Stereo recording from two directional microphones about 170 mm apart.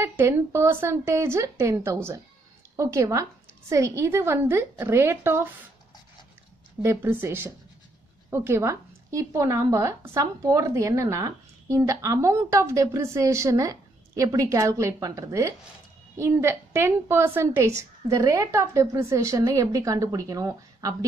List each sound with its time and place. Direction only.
0.0 s a woman's voice: 15° right (ahead or behind)
6.8 s a woman's voice: 15° right (ahead or behind)